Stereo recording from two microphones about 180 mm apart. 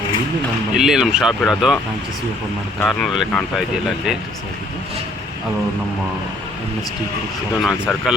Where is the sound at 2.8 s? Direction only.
Centre (ahead or behind).